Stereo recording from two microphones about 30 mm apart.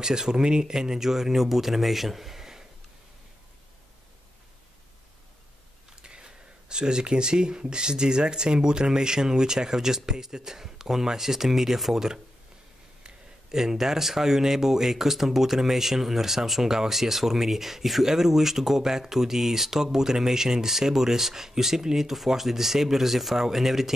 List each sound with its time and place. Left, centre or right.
0.0 s speech: right
0.7 s speech: centre
6.0 s speech: right
13.5 s speech: centre